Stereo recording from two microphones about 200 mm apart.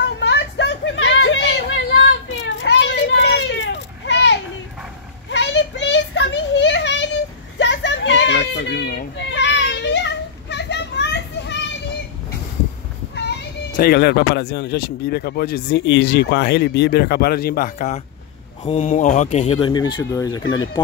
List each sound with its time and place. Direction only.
0.2 s a sound: 60° left (ahead or behind)
2.4 s children playing: 65° left (ahead or behind)
13.7 s speech: 50° left (ahead or behind); by 20.8 s 20° left (ahead or behind)